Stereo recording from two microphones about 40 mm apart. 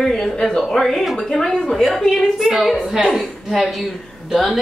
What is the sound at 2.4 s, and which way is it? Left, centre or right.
Speech, centre.